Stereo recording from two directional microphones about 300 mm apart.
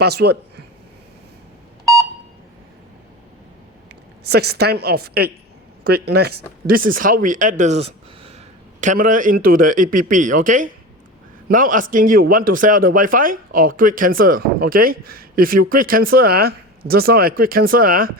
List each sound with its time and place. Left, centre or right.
0.0 s speech: right
4.3 s a woman's voice: right